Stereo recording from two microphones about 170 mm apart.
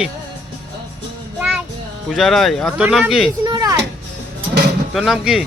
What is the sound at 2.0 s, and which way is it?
Speech, centre (ahead or behind).